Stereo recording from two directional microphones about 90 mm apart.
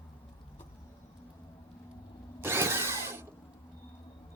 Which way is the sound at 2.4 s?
25° right (ahead or behind).